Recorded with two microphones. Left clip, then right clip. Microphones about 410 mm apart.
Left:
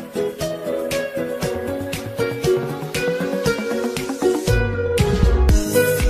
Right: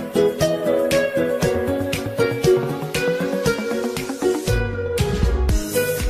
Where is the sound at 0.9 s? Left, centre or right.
Right.